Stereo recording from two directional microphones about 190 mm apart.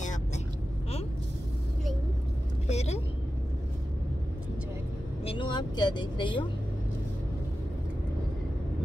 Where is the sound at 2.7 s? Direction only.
35° left (ahead or behind).